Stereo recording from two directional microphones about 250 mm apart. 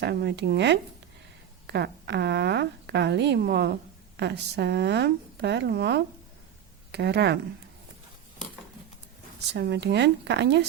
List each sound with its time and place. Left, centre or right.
0.0 s a woman's voice: right
9.5 s a woman's voice: right